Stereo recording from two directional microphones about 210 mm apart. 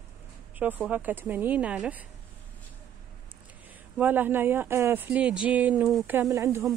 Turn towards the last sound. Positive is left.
turn(degrees=-15)  # may be behind; listen again after turning